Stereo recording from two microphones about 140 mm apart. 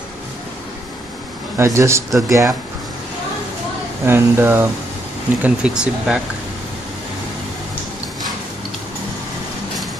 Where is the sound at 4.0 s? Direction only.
15° right (ahead or behind).